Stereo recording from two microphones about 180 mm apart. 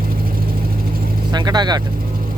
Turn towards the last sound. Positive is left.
turn(degrees=-25)  # may be behind; listen again after turning